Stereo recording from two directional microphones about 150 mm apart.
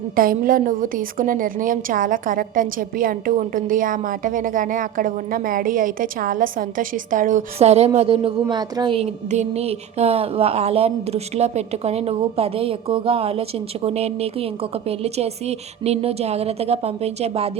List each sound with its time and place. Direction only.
0.2 s a woman's voice: 70° right (ahead or behind); by 9.0 s 35° right (ahead or behind)
9.3 s speech: 45° right (ahead or behind)